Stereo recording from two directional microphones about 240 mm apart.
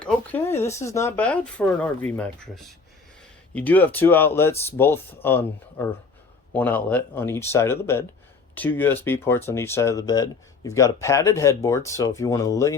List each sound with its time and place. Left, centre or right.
0.0 s speech: centre